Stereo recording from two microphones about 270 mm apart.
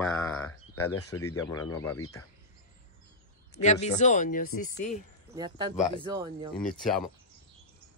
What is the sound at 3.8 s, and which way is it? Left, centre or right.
Speech, left.